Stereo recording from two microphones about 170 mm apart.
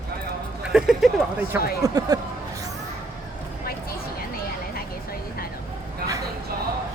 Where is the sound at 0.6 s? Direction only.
5° right (ahead or behind).